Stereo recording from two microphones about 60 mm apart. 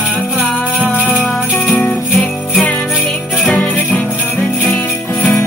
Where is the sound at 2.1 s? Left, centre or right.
Centre.